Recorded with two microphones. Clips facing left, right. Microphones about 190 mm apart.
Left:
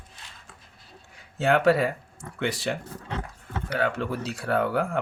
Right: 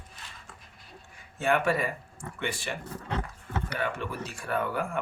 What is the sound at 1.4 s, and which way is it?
Speech, 80° left.